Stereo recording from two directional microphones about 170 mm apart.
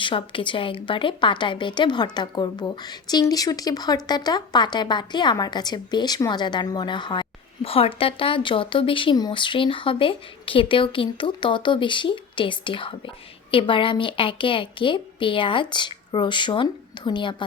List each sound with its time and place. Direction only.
0.0 s speech: 30° left (ahead or behind)